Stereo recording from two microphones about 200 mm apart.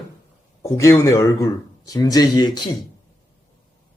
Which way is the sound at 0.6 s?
15° left (ahead or behind).